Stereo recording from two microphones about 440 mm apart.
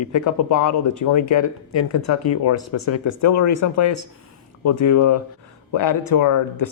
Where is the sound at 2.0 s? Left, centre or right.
Left.